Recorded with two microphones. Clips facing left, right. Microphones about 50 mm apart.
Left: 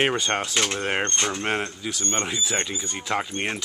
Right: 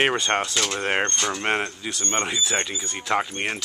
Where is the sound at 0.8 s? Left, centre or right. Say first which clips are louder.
Right 1 dB; centre.